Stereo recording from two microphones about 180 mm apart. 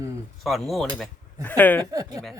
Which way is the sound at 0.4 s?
Centre (ahead or behind).